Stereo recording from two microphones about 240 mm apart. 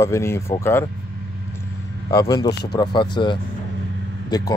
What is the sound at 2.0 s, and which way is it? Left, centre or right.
Speech, centre.